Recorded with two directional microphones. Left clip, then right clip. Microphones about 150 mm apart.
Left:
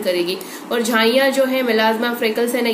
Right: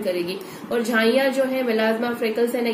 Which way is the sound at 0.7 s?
10° left (ahead or behind).